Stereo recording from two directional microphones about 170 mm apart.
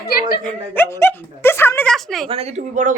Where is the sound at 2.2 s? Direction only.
35° right (ahead or behind).